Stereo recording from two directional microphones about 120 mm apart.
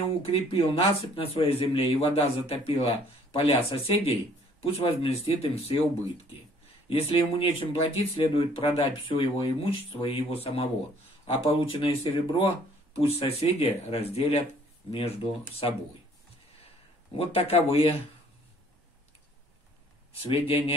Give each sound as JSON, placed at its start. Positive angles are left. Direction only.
{"t": 0.2, "sound": "a man's voice", "side_deg": 55}
{"t": 6.9, "sound": "a man's voice", "side_deg": 50}
{"t": 17.1, "sound": "a man's voice", "side_deg": 55}
{"t": 20.2, "sound": "speech", "side_deg": 50}